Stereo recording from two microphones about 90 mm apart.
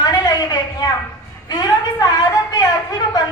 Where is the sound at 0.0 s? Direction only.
50° left (ahead or behind).